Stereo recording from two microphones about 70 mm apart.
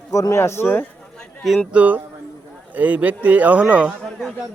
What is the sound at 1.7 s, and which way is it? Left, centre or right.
Speech, right.